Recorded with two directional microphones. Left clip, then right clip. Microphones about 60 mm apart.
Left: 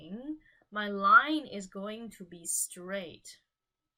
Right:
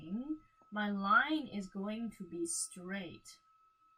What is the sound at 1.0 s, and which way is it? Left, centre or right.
Speech, left.